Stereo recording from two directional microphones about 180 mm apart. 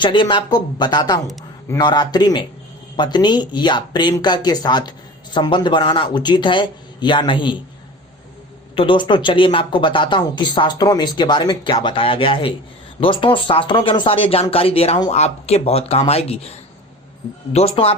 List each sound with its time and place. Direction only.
0.0 s speech: 25° left (ahead or behind)
8.7 s speech: 30° left (ahead or behind)